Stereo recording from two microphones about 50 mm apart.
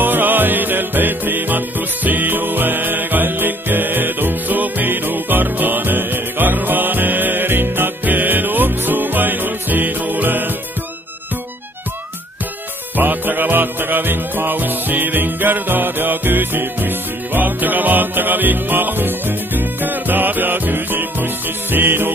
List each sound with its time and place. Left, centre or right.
0.0 s music: right
12.9 s music: right